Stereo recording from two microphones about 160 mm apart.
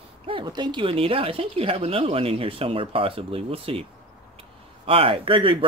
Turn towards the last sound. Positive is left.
turn(degrees=-30)  # may be behind; listen again after turning